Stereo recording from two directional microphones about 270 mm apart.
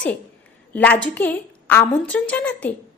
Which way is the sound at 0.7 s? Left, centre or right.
Centre.